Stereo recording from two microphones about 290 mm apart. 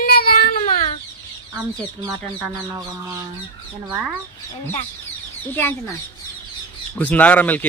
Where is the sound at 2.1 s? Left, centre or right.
Centre.